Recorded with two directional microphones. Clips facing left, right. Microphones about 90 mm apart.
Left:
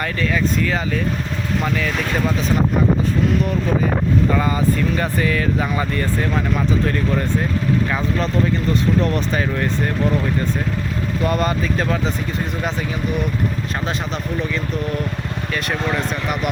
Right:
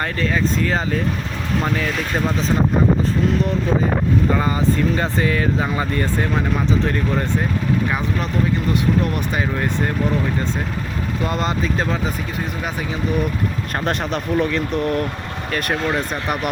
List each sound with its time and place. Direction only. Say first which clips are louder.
0.0 s speech: even; 30° right (ahead or behind)
4.9 s speech: even; 25° right (ahead or behind)
9.1 s speech: left 1 dB; 15° right (ahead or behind)
11.3 s speech: left 2 dB; 20° right (ahead or behind)
13.8 s speech: right 6 dB; 55° right (ahead or behind)